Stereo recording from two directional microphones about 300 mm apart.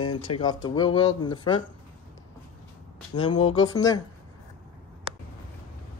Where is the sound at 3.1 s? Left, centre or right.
Centre.